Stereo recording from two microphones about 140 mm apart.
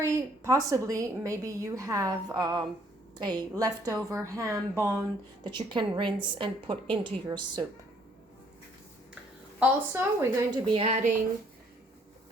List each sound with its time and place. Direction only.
0.0 s a woman's voice: 20° right (ahead or behind)
9.6 s a woman's voice: 15° right (ahead or behind)
10.7 s a woman's voice: 45° right (ahead or behind)